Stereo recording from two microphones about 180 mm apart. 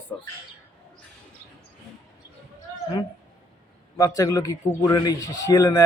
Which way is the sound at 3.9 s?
15° left (ahead or behind).